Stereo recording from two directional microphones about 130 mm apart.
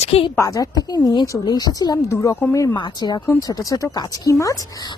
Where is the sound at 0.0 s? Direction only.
50° left (ahead or behind).